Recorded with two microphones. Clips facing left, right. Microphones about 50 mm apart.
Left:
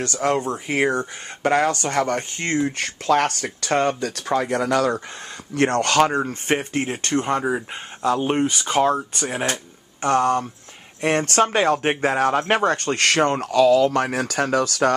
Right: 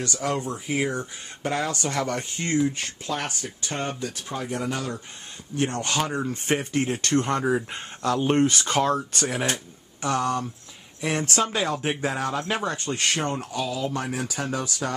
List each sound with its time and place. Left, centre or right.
0.0 s speech: left
2.8 s speech: left
5.6 s speech: left
6.1 s speech: left; by 9.5 s centre
10.0 s speech: left